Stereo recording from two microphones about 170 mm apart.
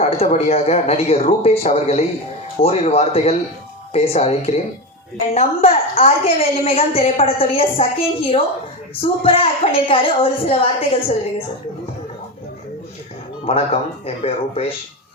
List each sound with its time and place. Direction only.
0.0 s a woman's voice: 35° left (ahead or behind)
13.4 s a woman's voice: 35° left (ahead or behind)